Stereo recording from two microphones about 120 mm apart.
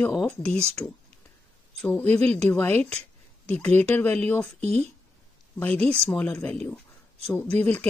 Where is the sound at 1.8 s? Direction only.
15° left (ahead or behind).